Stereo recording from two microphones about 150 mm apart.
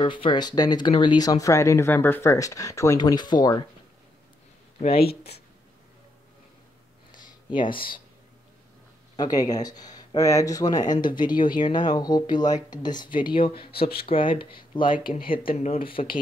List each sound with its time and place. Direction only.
0.0 s speech: 35° left (ahead or behind)
4.9 s speech: 90° left
7.5 s speech: 35° left (ahead or behind)
9.1 s speech: 25° left (ahead or behind)